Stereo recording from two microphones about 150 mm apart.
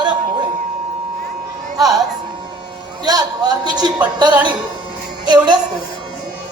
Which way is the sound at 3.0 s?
25° right (ahead or behind).